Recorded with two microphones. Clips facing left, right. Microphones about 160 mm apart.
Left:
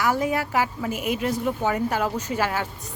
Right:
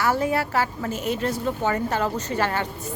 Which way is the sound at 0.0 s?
15° left (ahead or behind).